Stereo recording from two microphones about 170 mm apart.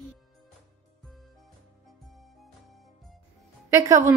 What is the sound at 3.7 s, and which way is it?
Speech, 15° right (ahead or behind).